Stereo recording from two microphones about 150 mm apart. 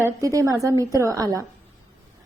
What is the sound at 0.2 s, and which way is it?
A woman's voice, 20° right (ahead or behind).